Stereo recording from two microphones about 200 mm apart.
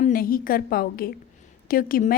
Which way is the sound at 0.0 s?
45° left (ahead or behind).